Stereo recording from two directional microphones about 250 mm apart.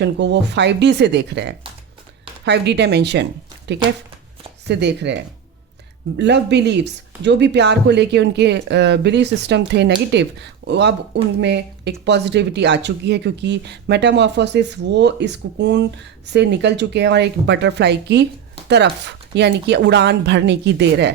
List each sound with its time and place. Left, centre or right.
0.0 s speech: right
4.7 s speech: right